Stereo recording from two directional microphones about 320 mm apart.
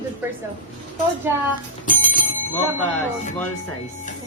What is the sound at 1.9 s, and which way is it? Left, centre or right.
Bicycle bell, left.